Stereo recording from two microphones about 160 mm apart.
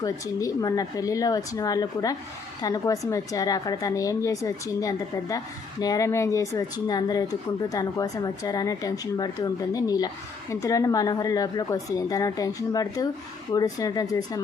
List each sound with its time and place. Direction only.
0.0 s speech: 20° left (ahead or behind)